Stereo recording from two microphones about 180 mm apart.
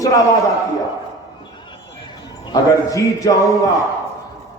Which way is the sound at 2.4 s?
20° left (ahead or behind).